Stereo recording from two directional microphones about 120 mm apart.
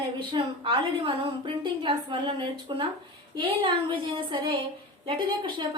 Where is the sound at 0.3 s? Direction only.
45° right (ahead or behind).